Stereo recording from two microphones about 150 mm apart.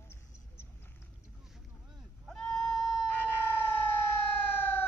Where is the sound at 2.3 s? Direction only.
Centre (ahead or behind).